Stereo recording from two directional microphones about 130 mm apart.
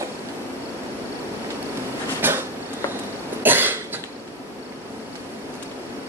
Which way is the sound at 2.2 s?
15° right (ahead or behind).